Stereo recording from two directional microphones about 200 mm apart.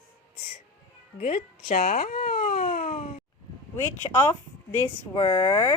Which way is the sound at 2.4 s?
45° left (ahead or behind).